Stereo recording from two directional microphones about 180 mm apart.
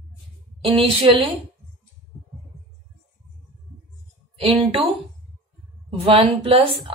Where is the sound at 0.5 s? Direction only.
30° right (ahead or behind).